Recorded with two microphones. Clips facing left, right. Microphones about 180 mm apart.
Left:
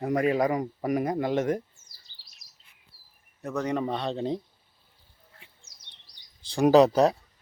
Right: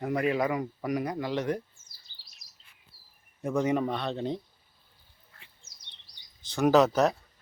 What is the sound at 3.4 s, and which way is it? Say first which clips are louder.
Speech: right 2 dB; 10° right (ahead or behind).